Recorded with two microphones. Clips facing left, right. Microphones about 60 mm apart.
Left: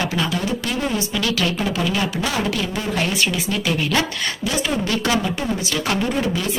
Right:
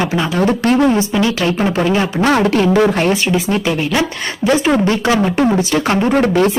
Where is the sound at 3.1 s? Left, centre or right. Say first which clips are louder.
Right 6 dB; right.